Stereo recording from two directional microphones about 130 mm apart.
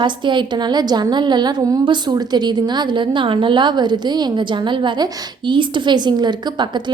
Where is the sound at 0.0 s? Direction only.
35° right (ahead or behind).